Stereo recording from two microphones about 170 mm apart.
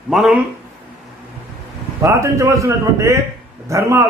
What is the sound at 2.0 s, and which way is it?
A man's voice, 15° right (ahead or behind).